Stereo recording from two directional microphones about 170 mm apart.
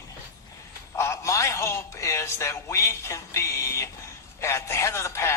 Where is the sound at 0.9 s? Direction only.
15° left (ahead or behind).